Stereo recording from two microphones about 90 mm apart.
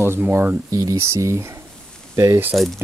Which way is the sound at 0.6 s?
40° right (ahead or behind).